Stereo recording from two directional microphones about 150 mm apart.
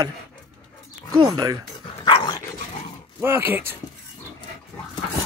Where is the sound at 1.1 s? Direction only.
25° right (ahead or behind).